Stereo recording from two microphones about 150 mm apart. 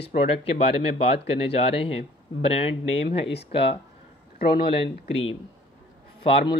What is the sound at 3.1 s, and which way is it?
Speech, 90° left.